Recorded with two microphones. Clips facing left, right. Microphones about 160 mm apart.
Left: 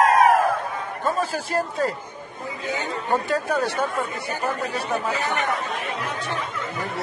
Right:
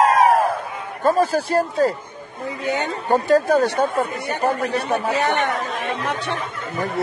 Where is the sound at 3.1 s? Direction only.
35° right (ahead or behind).